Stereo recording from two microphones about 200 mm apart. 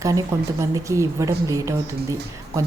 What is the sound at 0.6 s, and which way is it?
A woman's voice, 15° right (ahead or behind).